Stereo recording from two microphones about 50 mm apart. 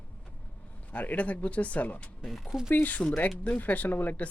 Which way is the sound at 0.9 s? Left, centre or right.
Left.